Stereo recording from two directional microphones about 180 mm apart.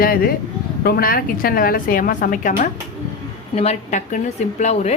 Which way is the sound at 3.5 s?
35° left (ahead or behind).